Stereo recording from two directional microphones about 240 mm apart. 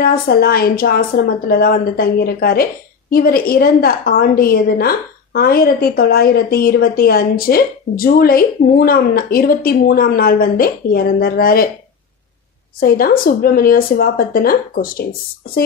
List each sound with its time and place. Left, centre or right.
0.0 s a woman's voice: left
12.8 s a woman's voice: left